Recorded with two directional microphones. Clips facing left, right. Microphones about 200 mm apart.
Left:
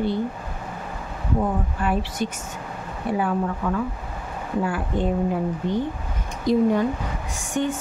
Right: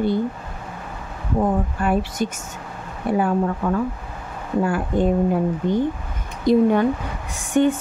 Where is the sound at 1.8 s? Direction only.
45° right (ahead or behind).